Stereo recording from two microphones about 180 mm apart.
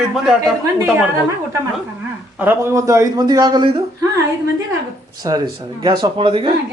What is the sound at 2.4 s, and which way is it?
A man's voice, 10° right (ahead or behind).